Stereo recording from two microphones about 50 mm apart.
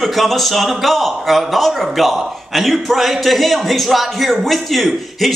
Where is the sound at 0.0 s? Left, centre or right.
Centre.